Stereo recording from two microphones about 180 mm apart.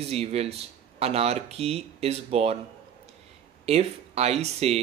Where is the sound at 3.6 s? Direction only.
35° right (ahead or behind).